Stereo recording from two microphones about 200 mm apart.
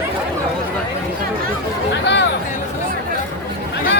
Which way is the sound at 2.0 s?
60° left (ahead or behind).